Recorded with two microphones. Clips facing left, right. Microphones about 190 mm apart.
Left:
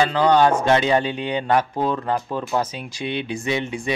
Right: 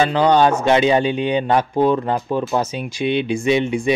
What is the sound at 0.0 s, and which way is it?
Speech, 20° right (ahead or behind).